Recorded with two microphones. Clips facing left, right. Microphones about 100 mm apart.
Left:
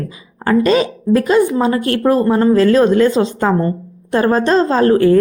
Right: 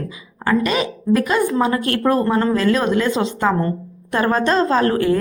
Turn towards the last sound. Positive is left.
turn(degrees=35)  # may be behind; listen again after turning